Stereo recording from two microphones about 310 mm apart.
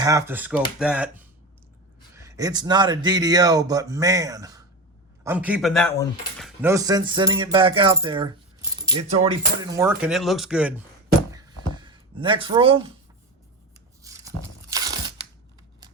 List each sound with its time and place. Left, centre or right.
0.0 s speech: centre
9.7 s speech: centre
12.1 s speech: centre
14.0 s tearing: centre